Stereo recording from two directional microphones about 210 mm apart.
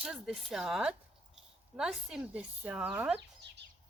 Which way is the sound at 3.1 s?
55° right (ahead or behind).